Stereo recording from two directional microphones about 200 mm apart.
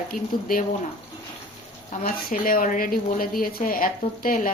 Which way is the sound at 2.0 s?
45° left (ahead or behind).